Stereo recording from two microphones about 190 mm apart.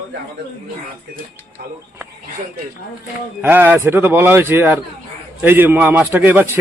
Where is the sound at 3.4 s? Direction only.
10° right (ahead or behind).